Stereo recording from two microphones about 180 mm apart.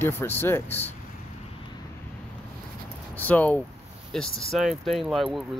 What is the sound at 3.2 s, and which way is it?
Speech, 10° left (ahead or behind).